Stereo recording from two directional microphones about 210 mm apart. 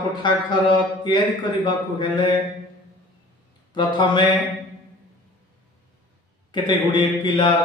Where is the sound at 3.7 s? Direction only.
20° left (ahead or behind).